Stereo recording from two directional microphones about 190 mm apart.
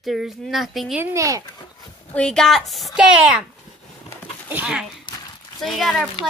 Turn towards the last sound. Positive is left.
turn(degrees=0)  # may be behind; listen again after turning